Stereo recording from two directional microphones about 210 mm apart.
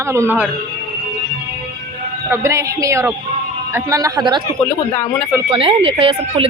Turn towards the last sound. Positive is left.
turn(degrees=-25)  # may be behind; listen again after turning